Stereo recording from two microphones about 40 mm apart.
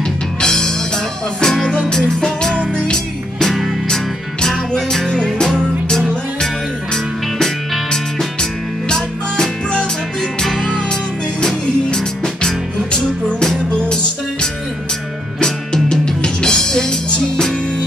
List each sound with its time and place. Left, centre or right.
0.4 s music: centre
4.7 s music: centre
8.4 s music: centre
11.4 s music: centre
15.4 s music: centre